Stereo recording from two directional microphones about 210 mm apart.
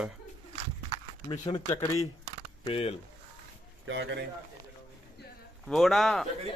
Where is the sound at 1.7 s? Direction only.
15° left (ahead or behind).